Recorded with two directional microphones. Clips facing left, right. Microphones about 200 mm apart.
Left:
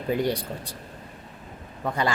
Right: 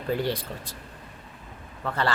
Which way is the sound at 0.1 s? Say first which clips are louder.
Left 2 dB; 15° left (ahead or behind).